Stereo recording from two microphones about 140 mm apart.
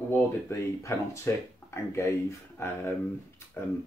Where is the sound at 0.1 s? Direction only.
20° left (ahead or behind).